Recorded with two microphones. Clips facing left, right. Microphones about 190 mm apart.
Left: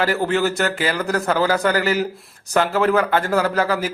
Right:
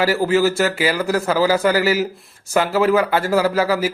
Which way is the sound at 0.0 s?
5° right (ahead or behind).